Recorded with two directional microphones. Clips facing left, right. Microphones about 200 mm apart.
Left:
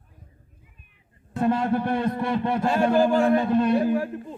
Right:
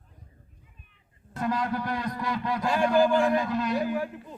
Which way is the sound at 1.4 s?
30° left (ahead or behind).